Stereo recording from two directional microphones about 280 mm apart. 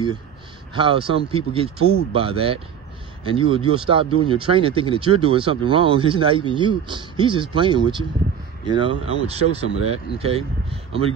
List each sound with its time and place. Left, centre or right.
0.7 s speech: centre